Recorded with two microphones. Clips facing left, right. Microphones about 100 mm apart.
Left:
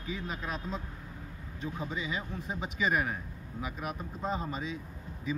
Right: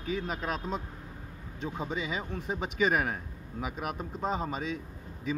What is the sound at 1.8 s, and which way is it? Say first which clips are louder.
Speech: right 3 dB; 60° right (ahead or behind).